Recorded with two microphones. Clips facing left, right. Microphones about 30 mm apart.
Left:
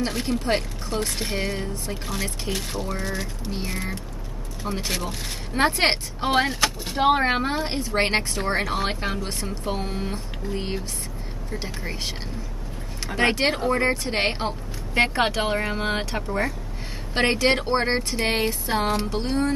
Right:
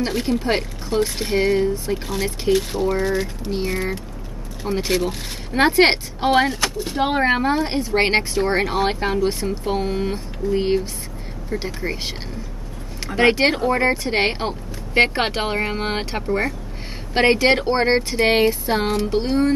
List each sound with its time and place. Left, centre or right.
0.0 s speech: centre
6.3 s speech: centre
15.0 s speech: right